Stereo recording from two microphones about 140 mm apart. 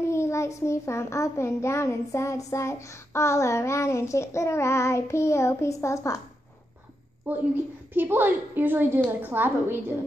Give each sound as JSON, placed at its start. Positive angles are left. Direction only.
{"t": 0.0, "sound": "a child's voice", "side_deg": 20}
{"t": 7.3, "sound": "a woman's voice", "side_deg": -10}